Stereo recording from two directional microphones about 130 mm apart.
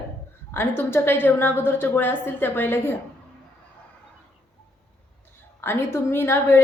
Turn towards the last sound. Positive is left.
turn(degrees=20)  # may be behind; listen again after turning